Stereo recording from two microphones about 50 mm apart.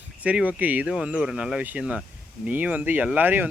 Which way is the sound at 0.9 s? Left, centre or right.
Centre.